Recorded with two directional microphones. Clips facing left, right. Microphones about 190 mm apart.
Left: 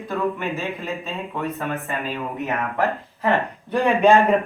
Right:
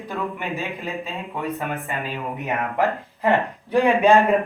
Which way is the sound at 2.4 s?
15° right (ahead or behind).